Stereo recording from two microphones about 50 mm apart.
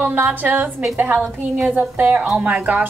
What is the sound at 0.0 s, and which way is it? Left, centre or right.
A woman's voice, right.